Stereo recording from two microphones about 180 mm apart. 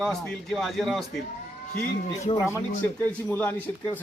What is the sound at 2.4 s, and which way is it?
Speech, 15° left (ahead or behind).